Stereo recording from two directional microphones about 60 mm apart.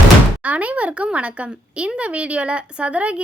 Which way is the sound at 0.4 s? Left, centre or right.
Right.